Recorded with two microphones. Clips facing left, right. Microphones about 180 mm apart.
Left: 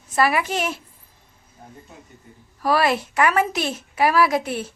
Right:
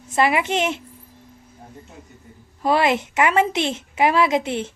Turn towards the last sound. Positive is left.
turn(degrees=-25)  # may be behind; listen again after turning